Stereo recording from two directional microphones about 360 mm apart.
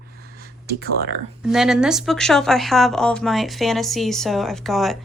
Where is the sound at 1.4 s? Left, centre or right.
Centre.